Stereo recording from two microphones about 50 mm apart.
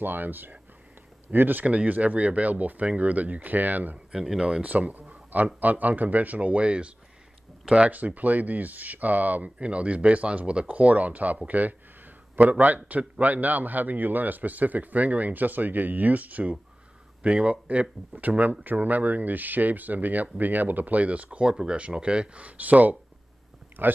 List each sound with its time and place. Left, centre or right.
0.0 s speech: right
1.7 s speech: right
4.1 s speech: centre
4.6 s speech: right
7.9 s speech: right
21.5 s speech: centre; by 22.9 s right
23.8 s speech: right